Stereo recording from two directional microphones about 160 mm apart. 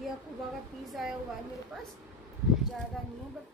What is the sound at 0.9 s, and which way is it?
Speech, centre (ahead or behind).